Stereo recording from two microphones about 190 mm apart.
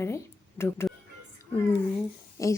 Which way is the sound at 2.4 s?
15° left (ahead or behind).